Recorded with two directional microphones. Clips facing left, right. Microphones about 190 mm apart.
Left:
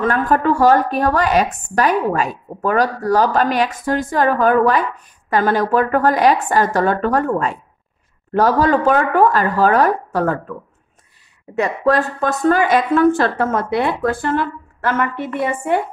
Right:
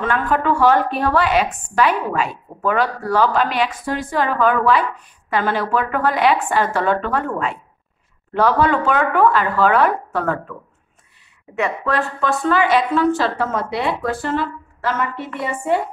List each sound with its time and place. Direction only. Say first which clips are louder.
0.0 s a woman's voice: left 3 dB; 40° left (ahead or behind)
11.5 s speech: left 4 dB; 40° left (ahead or behind); by 15.8 s 55° left (ahead or behind)